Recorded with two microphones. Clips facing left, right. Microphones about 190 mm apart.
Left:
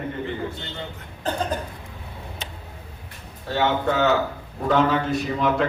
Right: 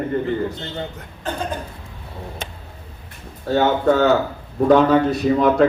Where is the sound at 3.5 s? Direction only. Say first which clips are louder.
Right 5 dB; 45° right (ahead or behind).